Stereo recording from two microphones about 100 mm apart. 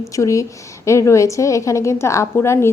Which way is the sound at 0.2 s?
30° left (ahead or behind).